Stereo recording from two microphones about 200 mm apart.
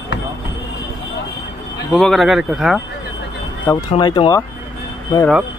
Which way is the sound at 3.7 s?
20° left (ahead or behind).